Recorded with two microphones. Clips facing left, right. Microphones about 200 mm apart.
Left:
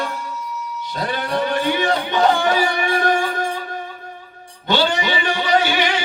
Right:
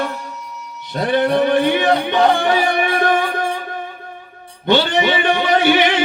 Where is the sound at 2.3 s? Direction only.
55° right (ahead or behind).